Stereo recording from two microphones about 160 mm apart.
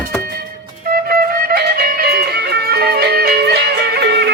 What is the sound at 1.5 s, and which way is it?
Music, 80° right.